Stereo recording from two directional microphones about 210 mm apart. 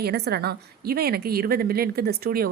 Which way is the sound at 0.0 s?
50° right (ahead or behind).